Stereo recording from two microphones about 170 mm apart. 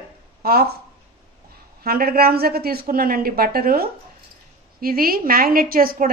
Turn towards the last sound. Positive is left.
turn(degrees=-60)  # may be behind; listen again after turning